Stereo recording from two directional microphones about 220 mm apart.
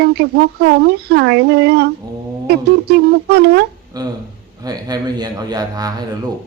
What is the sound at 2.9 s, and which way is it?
Speech, 50° right (ahead or behind).